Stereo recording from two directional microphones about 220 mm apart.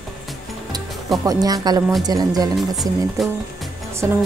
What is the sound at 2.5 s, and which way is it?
Speech, centre (ahead or behind).